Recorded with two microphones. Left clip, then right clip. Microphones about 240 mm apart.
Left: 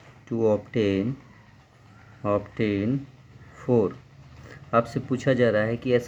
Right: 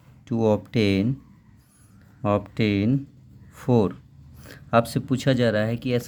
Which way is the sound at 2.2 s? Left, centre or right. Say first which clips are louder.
Right 1 dB; right.